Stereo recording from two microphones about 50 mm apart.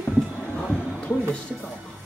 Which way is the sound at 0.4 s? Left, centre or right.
Left.